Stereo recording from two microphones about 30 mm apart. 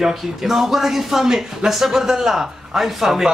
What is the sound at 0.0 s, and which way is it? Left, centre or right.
Speech, centre.